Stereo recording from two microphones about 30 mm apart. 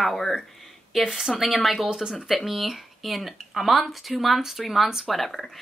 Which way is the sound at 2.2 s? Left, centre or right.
Centre.